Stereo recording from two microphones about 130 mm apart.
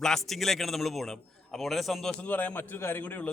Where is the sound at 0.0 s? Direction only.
Centre (ahead or behind).